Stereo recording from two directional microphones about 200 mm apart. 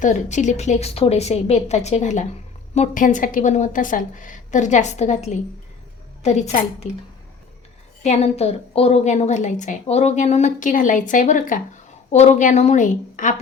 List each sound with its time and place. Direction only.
0.0 s a woman's voice: 35° left (ahead or behind)
8.0 s a woman's voice: 35° left (ahead or behind)